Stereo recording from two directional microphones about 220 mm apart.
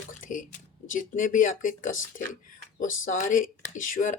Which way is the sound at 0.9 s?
35° left (ahead or behind).